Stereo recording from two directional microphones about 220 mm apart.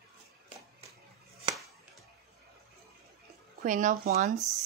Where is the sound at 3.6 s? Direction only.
35° right (ahead or behind).